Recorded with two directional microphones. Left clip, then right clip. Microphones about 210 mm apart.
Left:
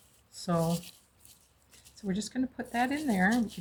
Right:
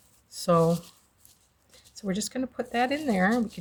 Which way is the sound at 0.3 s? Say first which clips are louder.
Right 9 dB; 55° right (ahead or behind).